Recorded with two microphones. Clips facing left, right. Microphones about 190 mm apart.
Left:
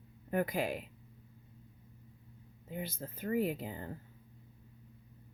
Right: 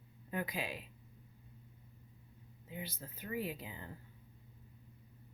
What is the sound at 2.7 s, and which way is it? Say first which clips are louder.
Speech: left 5 dB; 50° left (ahead or behind).